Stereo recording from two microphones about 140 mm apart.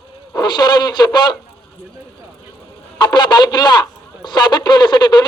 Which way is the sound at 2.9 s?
30° left (ahead or behind).